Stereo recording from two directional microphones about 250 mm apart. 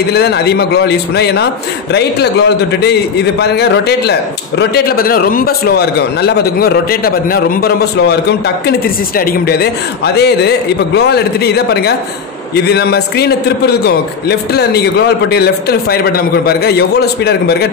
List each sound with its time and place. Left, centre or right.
0.1 s a man's voice: left